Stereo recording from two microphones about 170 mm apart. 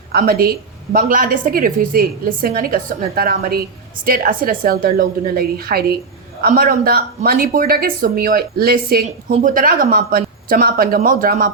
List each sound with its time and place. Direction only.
0.1 s speech: 65° right (ahead or behind)
9.0 s speech: 45° right (ahead or behind)